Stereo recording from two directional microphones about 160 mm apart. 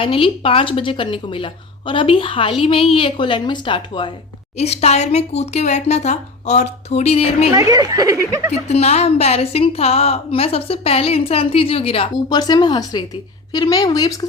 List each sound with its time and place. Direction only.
0.0 s a woman's voice: 35° left (ahead or behind)
4.5 s a woman's voice: 40° left (ahead or behind)
7.5 s a woman's voice: 25° right (ahead or behind)
8.6 s a woman's voice: 40° left (ahead or behind); by 14.3 s 25° left (ahead or behind)